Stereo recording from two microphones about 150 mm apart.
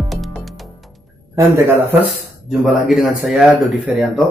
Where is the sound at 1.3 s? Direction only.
20° right (ahead or behind).